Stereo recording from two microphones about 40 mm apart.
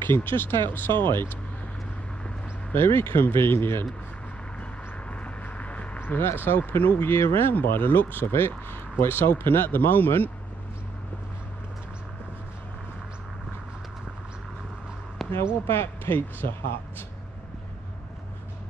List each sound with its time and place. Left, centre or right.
0.0 s speech: left
2.7 s speech: left
3.3 s speech: left
5.1 s vehicle: left
5.9 s speech: left
8.3 s speech: left
15.2 s a sound: centre
15.6 s speech: left